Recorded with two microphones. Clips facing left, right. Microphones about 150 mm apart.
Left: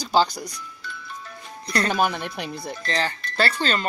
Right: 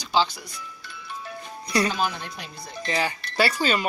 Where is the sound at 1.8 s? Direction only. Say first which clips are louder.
Left 3 dB; 60° left (ahead or behind).